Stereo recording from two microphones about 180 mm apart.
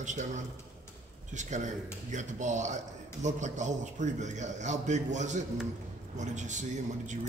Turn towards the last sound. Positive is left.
turn(degrees=-40)  # may be behind; listen again after turning